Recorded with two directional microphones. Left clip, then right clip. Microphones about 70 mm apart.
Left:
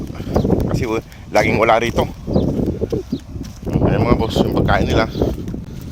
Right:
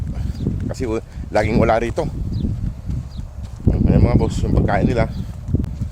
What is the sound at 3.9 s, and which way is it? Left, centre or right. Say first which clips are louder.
Speech: left 3 dB; right.